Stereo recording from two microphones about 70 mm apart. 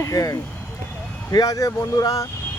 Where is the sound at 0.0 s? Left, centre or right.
Left.